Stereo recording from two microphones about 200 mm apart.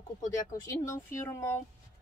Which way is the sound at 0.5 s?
15° left (ahead or behind).